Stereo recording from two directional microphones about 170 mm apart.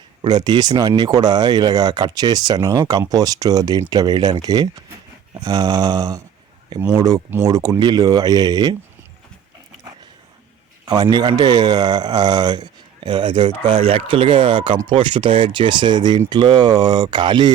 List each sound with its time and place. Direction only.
0.2 s speech: 25° right (ahead or behind)
10.8 s speech: 25° right (ahead or behind)